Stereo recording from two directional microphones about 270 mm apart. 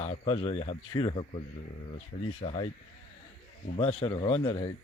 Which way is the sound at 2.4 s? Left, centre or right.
Left.